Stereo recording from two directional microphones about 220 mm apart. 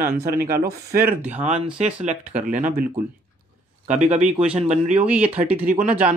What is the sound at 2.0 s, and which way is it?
Speech, 35° right (ahead or behind).